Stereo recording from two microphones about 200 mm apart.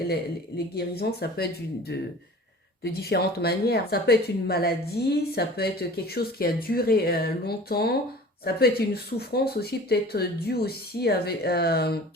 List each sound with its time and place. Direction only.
0.8 s speech: 55° left (ahead or behind)